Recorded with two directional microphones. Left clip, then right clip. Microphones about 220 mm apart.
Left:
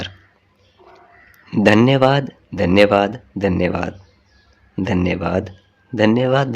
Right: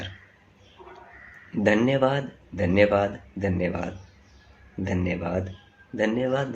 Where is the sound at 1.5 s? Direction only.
50° left (ahead or behind).